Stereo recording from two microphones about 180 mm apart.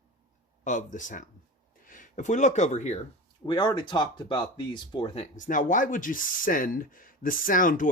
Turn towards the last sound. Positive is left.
turn(degrees=50)  # may be behind; listen again after turning